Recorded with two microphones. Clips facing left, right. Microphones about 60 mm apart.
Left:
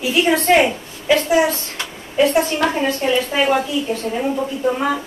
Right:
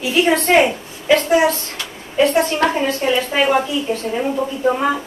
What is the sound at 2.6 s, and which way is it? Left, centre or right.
Speech, right.